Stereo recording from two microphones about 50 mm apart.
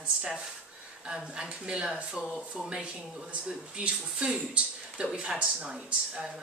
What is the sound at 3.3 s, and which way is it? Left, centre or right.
Speech, right.